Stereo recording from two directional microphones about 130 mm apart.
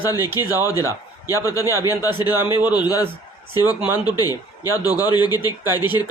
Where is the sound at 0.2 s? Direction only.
15° right (ahead or behind).